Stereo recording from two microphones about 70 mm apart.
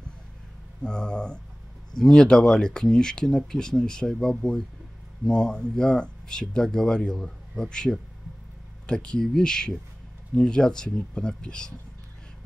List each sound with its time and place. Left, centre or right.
0.8 s speech: centre